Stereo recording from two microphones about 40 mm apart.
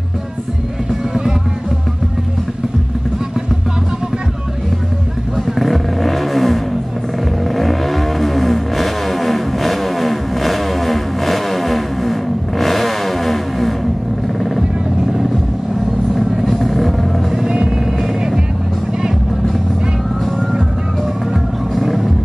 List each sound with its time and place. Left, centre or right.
5.6 s vehicle: centre
16.5 s music: centre
17.5 s music: right
21.7 s vehicle: centre